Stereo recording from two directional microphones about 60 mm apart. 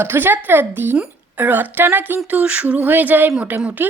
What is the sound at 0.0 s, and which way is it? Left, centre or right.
A woman's voice, right.